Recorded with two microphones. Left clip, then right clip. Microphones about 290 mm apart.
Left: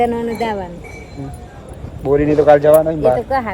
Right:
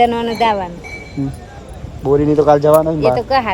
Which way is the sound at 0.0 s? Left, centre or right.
Right.